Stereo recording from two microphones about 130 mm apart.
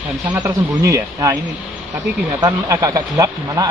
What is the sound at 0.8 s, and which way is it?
Speech, 25° right (ahead or behind).